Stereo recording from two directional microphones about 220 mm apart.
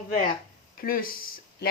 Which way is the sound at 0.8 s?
40° left (ahead or behind).